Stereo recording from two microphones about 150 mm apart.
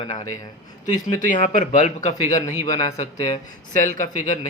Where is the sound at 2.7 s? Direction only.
25° left (ahead or behind).